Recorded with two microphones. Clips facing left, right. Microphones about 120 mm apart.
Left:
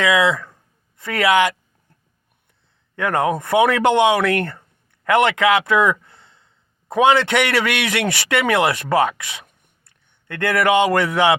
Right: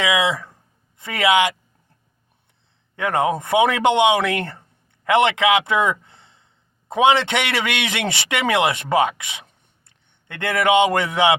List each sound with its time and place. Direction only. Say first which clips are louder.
0.0 s speech: left 3 dB; 15° right (ahead or behind)
2.9 s a man's voice: left 1 dB; 20° right (ahead or behind)